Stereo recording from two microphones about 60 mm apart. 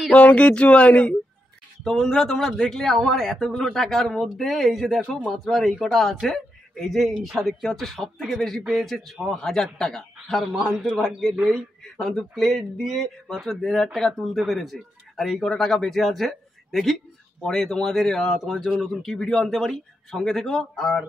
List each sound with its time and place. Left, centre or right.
0.1 s speech: left
1.9 s a man's voice: centre
10.5 s a man's voice: centre